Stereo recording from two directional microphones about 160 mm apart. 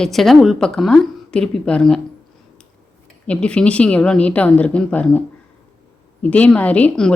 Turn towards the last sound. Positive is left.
turn(degrees=5)  # may be behind; listen again after turning